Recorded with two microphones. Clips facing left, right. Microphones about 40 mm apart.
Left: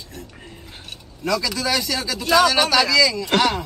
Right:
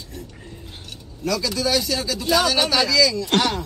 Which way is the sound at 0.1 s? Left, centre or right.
Left.